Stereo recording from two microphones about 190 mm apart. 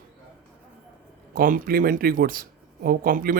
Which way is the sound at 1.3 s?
45° right (ahead or behind).